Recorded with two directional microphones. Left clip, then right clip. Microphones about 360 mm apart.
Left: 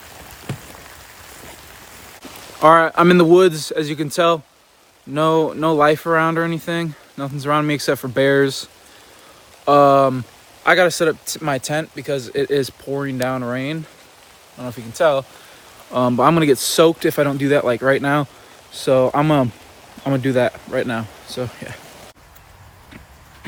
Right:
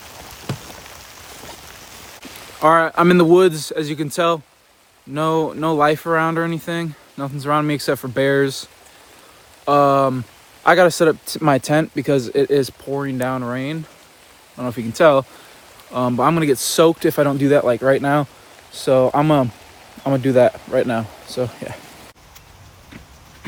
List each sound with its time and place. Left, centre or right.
0.5 s a sound: centre
2.6 s speech: centre
14.6 s speech: right
15.9 s speech: centre